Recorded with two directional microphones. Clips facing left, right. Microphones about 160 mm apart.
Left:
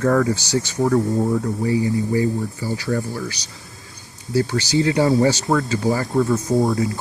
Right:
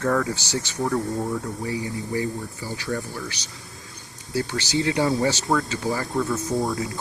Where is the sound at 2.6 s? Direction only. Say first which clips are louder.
Left 4 dB; 40° left (ahead or behind).